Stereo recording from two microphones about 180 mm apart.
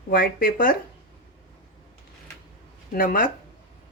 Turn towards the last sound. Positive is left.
turn(degrees=50)  # may be behind; listen again after turning